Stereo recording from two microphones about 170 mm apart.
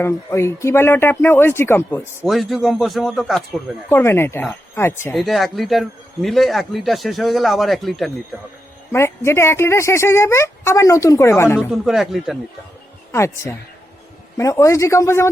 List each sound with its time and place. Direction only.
0.0 s speech: 15° left (ahead or behind)
2.2 s speech: centre (ahead or behind)
3.8 s speech: 15° left (ahead or behind)
5.1 s speech: centre (ahead or behind)
8.9 s speech: 15° left (ahead or behind)
11.7 s speech: centre (ahead or behind)
13.1 s speech: 15° left (ahead or behind)